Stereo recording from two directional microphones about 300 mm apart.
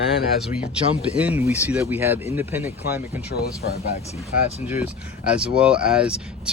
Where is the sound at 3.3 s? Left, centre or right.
Left.